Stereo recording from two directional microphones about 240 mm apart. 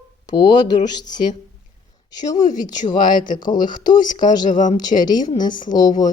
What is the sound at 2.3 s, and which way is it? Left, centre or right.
A woman's voice, centre.